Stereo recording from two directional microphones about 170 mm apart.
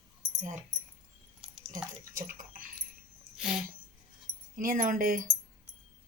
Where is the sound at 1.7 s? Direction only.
50° right (ahead or behind).